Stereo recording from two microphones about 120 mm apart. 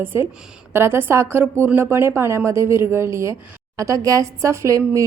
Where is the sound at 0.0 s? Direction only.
20° right (ahead or behind).